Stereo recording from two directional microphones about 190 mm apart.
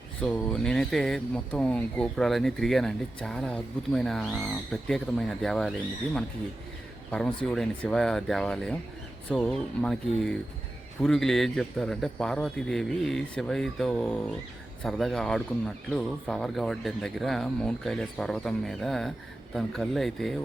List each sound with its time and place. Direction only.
0.2 s speech: 5° left (ahead or behind)
7.1 s speech: 5° left (ahead or behind)